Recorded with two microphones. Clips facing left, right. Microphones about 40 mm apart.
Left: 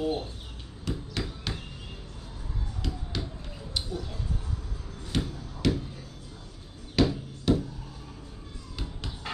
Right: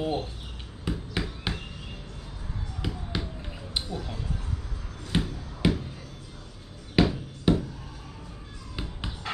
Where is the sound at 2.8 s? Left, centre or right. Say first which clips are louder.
Right 2 dB; right.